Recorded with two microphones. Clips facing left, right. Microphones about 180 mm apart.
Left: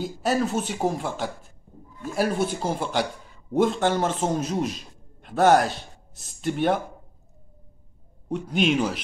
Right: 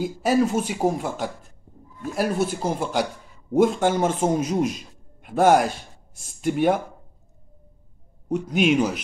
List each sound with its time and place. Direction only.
0.0 s a man's voice: 5° right (ahead or behind)
8.5 s speech: 5° right (ahead or behind)